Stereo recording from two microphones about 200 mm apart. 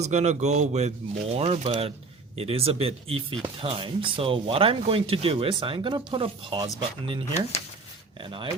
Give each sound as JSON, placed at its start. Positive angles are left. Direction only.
{"t": 0.0, "sound": "speech", "side_deg": -35}